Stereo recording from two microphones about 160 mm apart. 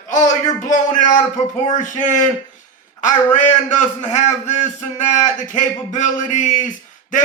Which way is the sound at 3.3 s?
50° left (ahead or behind).